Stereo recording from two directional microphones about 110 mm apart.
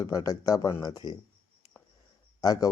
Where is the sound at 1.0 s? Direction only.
35° right (ahead or behind).